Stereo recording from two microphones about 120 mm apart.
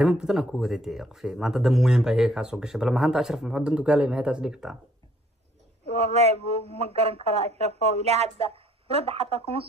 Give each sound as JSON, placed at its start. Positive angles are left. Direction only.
{"t": 0.0, "sound": "speech", "side_deg": -5}
{"t": 5.9, "sound": "speech", "side_deg": -60}